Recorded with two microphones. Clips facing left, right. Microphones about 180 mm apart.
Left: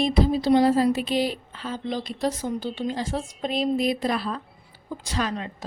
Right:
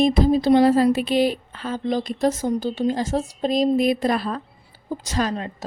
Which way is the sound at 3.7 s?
50° right (ahead or behind).